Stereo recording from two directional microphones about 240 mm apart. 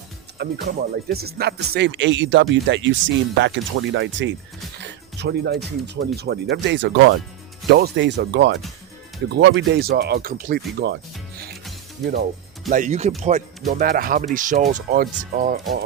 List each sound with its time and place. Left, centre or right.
0.3 s speech: right
4.8 s music: right
6.1 s speech: right
12.7 s speech: right